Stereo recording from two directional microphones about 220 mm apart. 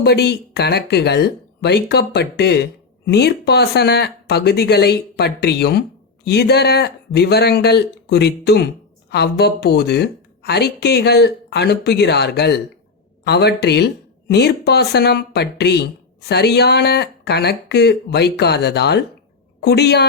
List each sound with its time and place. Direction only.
0.0 s speech: 50° left (ahead or behind)